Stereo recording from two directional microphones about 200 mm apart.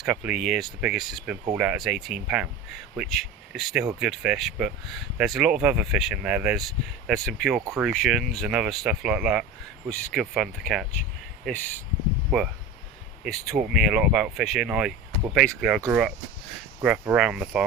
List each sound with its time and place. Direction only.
0.0 s speech: 5° right (ahead or behind)
12.3 s speech: 5° right (ahead or behind)